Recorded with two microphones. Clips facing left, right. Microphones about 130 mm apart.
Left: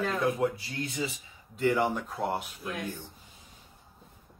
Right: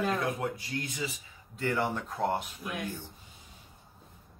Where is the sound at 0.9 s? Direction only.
25° left (ahead or behind).